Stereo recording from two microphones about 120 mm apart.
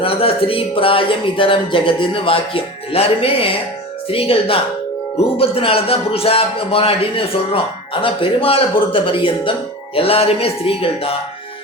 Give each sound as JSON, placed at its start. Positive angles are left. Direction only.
{"t": 0.0, "sound": "speech", "side_deg": 50}